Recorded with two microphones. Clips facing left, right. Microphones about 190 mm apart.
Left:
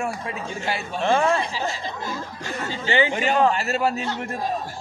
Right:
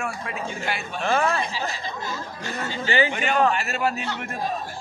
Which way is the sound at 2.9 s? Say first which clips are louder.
Left 2 dB; 25° left (ahead or behind).